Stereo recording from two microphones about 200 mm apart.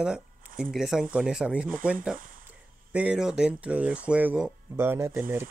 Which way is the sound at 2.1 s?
45° right (ahead or behind).